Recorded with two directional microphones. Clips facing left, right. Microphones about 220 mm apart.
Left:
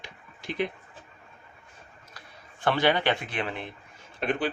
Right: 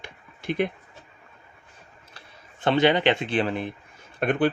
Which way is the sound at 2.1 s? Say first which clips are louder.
Even; 20° right (ahead or behind).